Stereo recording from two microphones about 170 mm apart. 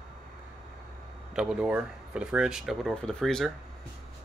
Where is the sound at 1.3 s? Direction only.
5° right (ahead or behind).